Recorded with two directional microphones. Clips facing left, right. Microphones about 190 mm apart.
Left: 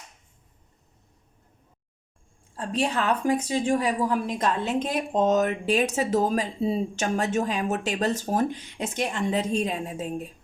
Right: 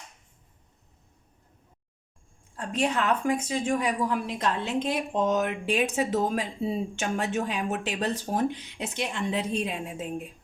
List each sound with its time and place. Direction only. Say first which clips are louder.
2.6 s a woman's voice: left 1 dB; 35° left (ahead or behind)